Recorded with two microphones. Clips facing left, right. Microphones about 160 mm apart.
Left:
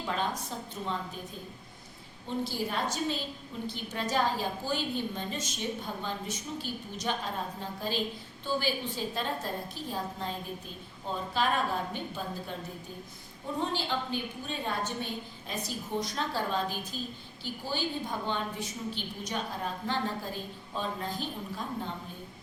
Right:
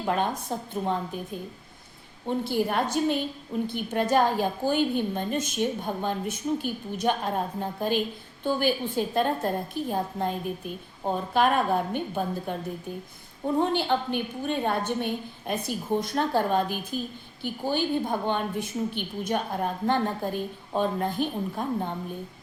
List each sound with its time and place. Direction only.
0.0 s a woman's voice: 55° right (ahead or behind)
2.2 s a woman's voice: 60° right (ahead or behind)
13.6 s a woman's voice: 60° right (ahead or behind)